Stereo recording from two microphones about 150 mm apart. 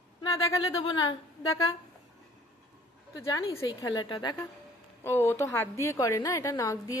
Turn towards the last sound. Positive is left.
turn(degrees=20)  # may be behind; listen again after turning